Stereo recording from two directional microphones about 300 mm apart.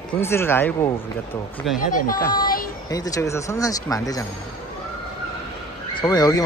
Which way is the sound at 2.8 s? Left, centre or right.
Centre.